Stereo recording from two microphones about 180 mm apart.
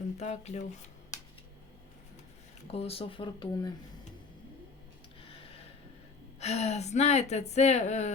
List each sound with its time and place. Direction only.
0.2 s a woman's voice: 40° left (ahead or behind)
2.7 s a woman's voice: 35° left (ahead or behind)
5.3 s a sound: 30° left (ahead or behind)
6.4 s a woman's voice: 35° left (ahead or behind)